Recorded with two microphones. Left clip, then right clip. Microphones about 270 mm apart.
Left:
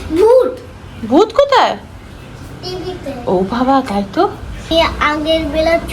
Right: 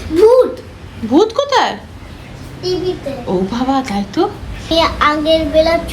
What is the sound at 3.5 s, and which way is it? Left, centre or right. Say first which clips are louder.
A woman's voice: left 3 dB; centre.